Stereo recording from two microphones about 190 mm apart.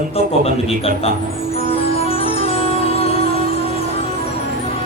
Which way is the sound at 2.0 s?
30° left (ahead or behind).